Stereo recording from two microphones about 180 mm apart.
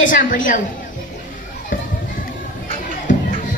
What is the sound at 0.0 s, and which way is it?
Speech, 50° left (ahead or behind).